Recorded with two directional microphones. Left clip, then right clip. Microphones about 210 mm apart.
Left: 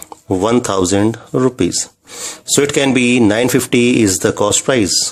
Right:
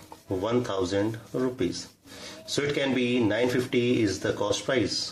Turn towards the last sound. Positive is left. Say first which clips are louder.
# left 12 dB
turn(degrees=55)  # may be behind; listen again after turning